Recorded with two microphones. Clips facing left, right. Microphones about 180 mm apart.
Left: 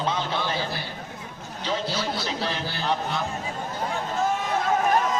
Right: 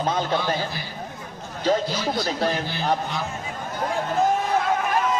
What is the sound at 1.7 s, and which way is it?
Speech, 45° right (ahead or behind).